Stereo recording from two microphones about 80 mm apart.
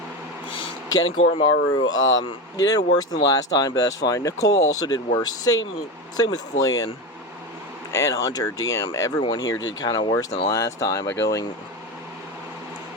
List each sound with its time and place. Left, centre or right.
1.4 s speech: left
2.6 s speech: left
7.9 s speech: left
10.5 s speech: left